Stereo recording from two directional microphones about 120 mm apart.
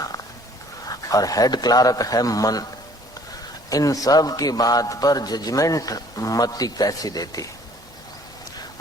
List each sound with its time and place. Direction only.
0.9 s a man's voice: 30° left (ahead or behind)
3.7 s a man's voice: 30° left (ahead or behind)